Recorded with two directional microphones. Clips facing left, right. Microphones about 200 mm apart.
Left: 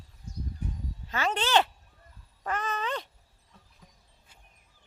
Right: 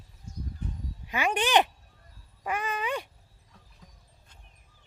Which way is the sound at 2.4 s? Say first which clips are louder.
Right 1 dB; 10° right (ahead or behind).